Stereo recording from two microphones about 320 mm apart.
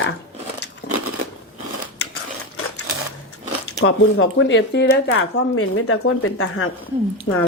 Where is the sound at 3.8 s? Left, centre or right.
Left.